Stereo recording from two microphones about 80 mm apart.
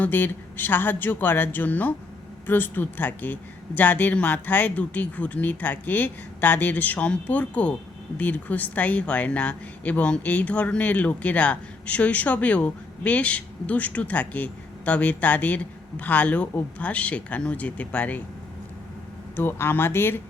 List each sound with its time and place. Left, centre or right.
0.0 s speech: left
19.4 s speech: left